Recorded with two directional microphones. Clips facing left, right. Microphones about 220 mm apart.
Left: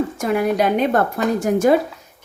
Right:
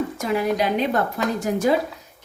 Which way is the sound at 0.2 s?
50° left (ahead or behind).